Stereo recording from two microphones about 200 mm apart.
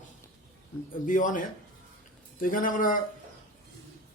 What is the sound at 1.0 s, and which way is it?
A man's voice, 40° left (ahead or behind).